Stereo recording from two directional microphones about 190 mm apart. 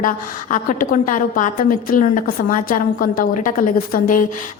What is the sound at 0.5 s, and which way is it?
A woman's voice, 45° left (ahead or behind).